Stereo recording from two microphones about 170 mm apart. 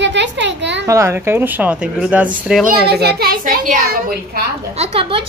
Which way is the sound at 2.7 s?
70° right (ahead or behind).